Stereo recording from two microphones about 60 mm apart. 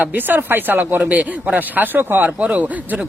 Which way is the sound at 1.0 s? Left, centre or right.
Right.